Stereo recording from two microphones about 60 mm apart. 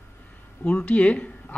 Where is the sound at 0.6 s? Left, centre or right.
Left.